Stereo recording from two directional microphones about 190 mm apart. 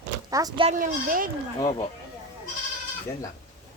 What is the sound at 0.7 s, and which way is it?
Speech, 45° right (ahead or behind).